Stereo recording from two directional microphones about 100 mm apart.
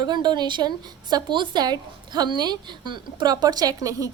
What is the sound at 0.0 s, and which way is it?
A woman's voice, 45° right (ahead or behind).